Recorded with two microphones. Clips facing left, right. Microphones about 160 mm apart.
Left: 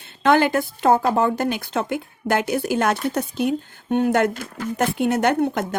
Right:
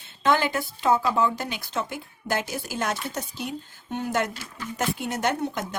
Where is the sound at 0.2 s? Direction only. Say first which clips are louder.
Left 6 dB; 60° left (ahead or behind).